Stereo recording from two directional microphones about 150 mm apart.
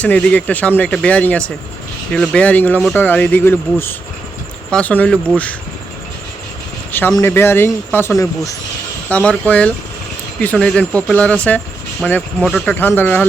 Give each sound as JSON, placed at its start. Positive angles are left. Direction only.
{"t": 0.0, "sound": "speech", "side_deg": 10}
{"t": 7.2, "sound": "speech", "side_deg": 15}